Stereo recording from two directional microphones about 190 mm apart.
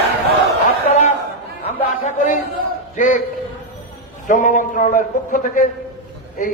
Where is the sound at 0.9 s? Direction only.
35° left (ahead or behind).